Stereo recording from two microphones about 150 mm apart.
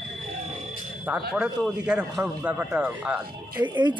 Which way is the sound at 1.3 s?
5° right (ahead or behind).